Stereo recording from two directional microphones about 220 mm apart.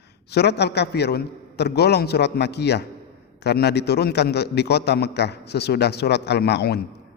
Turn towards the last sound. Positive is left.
turn(degrees=50)  # may be behind; listen again after turning